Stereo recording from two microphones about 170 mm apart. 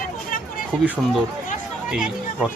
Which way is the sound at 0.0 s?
55° left (ahead or behind).